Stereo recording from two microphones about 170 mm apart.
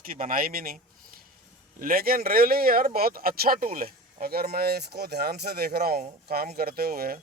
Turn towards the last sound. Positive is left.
turn(degrees=-60)  # may be behind; listen again after turning